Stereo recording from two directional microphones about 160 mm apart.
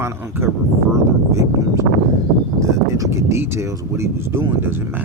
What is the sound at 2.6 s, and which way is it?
Speech, 20° right (ahead or behind).